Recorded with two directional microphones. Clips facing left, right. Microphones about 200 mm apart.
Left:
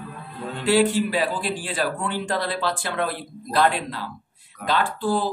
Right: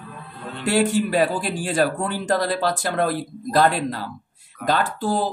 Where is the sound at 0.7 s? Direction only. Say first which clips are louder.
Even; 45° right (ahead or behind).